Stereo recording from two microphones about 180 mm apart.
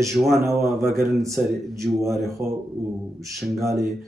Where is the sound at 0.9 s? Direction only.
15° right (ahead or behind).